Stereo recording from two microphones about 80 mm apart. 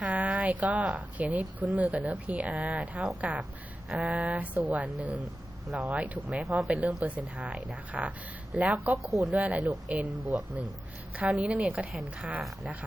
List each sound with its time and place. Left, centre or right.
0.0 s a woman's voice: centre
6.3 s a woman's voice: centre
9.0 s speech: centre
9.3 s a woman's voice: centre